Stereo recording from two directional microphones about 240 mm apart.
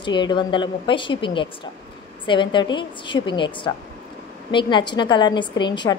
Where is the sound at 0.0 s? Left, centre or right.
Centre.